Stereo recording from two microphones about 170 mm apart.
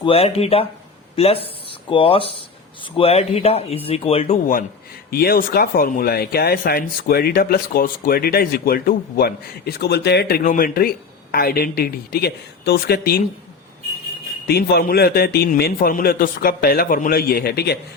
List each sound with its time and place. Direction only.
0.0 s speech: 35° left (ahead or behind)
5.1 s speech: 65° left (ahead or behind)
14.4 s speech: 70° left (ahead or behind)